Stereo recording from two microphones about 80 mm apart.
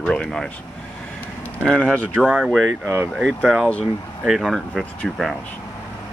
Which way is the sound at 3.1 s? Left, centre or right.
Centre.